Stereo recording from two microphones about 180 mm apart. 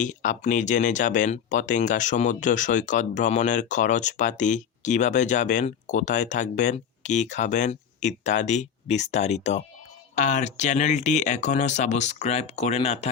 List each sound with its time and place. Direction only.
0.0 s speech: 45° left (ahead or behind)